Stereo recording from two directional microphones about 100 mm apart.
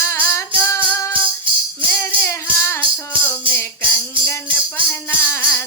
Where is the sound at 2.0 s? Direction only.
20° left (ahead or behind).